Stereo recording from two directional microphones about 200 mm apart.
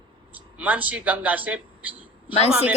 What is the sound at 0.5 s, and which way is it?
A man's voice, 5° right (ahead or behind).